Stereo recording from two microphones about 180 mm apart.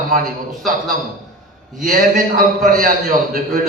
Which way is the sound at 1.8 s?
50° right (ahead or behind).